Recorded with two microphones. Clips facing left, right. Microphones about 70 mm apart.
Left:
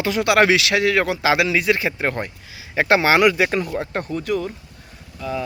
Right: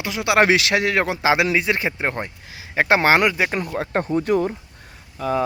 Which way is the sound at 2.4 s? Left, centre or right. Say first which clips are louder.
Even; right.